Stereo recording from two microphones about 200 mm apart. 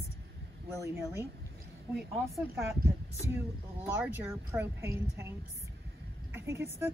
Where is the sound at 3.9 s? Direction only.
10° right (ahead or behind).